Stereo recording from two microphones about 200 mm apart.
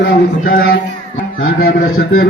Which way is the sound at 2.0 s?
50° left (ahead or behind).